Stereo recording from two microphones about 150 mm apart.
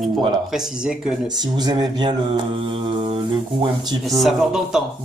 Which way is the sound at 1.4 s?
25° right (ahead or behind).